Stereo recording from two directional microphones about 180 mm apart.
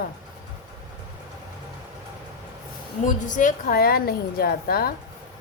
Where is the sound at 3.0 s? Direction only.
45° left (ahead or behind).